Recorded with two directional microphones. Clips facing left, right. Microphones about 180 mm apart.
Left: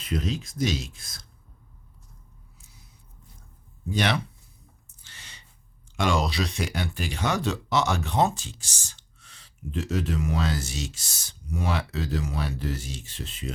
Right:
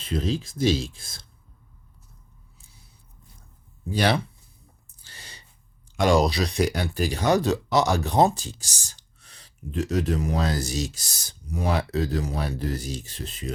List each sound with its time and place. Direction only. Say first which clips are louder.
0.0 s speech: right 3 dB; 30° right (ahead or behind)
2.6 s a sound: left 1 dB; 30° right (ahead or behind)
3.8 s speech: right 3 dB; 30° right (ahead or behind)
4.9 s owl: right 4 dB; 35° right (ahead or behind)
6.1 s speech: right 6 dB; 35° right (ahead or behind)